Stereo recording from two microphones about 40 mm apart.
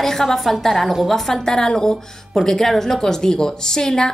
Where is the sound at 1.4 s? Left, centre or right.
Centre.